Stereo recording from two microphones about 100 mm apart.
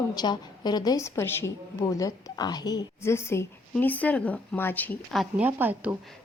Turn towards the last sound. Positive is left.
turn(degrees=-15)  # may be behind; listen again after turning